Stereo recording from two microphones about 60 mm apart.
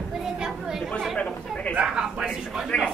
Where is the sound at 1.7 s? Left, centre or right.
Centre.